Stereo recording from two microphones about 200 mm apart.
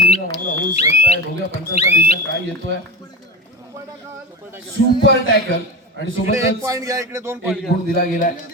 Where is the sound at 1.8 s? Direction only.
30° left (ahead or behind).